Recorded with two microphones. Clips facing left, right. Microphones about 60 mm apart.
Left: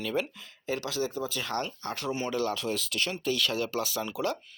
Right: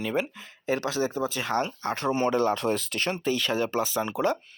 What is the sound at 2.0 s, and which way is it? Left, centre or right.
Speech, right.